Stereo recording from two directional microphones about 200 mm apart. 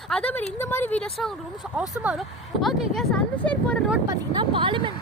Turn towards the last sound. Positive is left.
turn(degrees=-25)  # may be behind; listen again after turning